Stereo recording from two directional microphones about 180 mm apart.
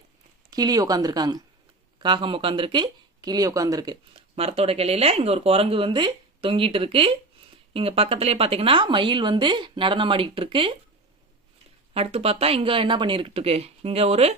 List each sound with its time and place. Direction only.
0.5 s speech: 20° right (ahead or behind)
11.9 s speech: 35° right (ahead or behind)